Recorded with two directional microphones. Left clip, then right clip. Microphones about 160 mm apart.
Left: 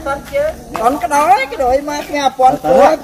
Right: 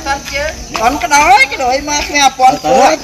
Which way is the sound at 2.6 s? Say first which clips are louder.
Even; 10° right (ahead or behind).